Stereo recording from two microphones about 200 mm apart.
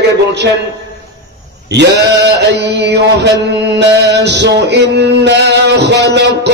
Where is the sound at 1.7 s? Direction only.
60° right (ahead or behind).